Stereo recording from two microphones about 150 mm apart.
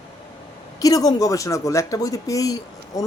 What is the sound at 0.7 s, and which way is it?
Speech, 25° left (ahead or behind).